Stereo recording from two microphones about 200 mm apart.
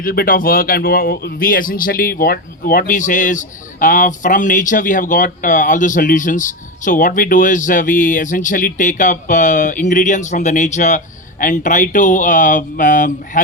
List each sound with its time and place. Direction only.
0.0 s a man's voice: 45° left (ahead or behind)